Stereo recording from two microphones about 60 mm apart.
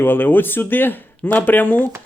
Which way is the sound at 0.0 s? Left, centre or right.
Left.